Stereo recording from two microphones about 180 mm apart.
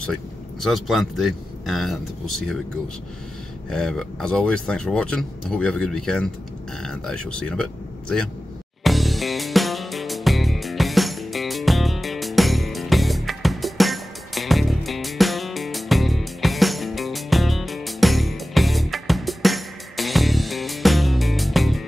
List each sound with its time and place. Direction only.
0.0 s speech: centre (ahead or behind)
3.7 s speech: 5° left (ahead or behind)
8.8 s music: centre (ahead or behind)